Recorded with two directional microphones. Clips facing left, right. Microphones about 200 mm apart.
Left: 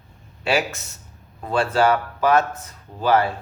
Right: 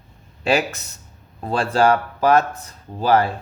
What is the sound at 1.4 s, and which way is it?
A man's voice, 35° right (ahead or behind).